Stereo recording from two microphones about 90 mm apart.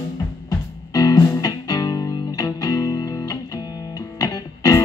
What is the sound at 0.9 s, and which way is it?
Music, 45° left (ahead or behind).